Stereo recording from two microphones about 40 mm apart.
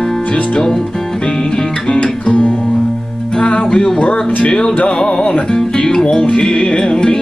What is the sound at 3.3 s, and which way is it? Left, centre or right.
Music, left.